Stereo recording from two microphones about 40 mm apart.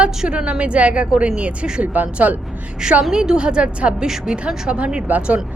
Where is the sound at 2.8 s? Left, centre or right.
Right.